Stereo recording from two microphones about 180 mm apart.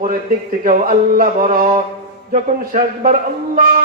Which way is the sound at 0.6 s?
50° right (ahead or behind).